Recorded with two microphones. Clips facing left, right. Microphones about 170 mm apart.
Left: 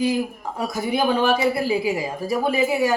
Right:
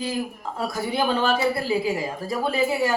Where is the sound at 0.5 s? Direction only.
20° left (ahead or behind).